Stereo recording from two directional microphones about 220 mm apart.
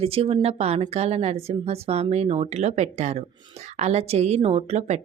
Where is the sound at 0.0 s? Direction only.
25° right (ahead or behind).